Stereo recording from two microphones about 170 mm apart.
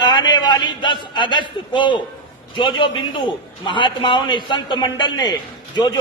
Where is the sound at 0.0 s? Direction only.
25° left (ahead or behind).